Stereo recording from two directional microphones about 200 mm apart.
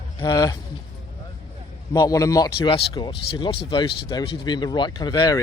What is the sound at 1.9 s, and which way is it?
Speech, 15° left (ahead or behind).